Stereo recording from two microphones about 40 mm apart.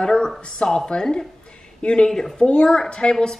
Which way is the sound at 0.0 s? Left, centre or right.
Left.